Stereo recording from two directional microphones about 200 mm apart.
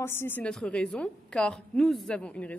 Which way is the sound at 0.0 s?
10° left (ahead or behind).